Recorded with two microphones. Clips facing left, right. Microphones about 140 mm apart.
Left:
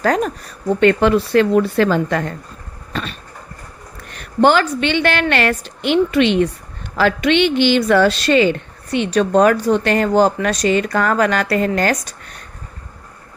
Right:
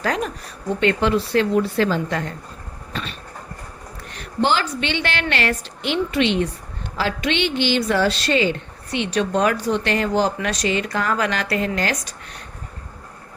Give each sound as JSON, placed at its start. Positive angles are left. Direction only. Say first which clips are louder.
{"t": 0.0, "sound": "a woman's voice", "louder": "left 6 dB", "side_deg": 45}
{"t": 2.9, "sound": "a sound", "louder": "left 5 dB", "side_deg": 45}
{"t": 4.4, "sound": "a woman's voice", "louder": "left 7 dB", "side_deg": 55}